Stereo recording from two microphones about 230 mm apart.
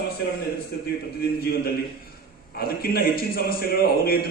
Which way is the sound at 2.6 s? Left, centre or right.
Left.